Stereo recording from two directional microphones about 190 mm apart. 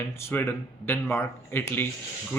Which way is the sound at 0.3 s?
10° left (ahead or behind).